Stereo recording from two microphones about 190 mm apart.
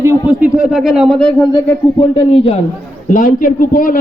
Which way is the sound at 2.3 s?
35° left (ahead or behind).